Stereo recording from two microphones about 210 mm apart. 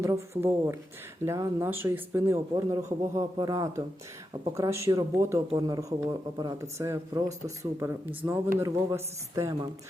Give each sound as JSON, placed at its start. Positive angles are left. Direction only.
{"t": 0.0, "sound": "speech", "side_deg": -15}